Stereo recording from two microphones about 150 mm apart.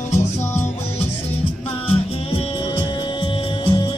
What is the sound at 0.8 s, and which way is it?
Music, 45° left (ahead or behind).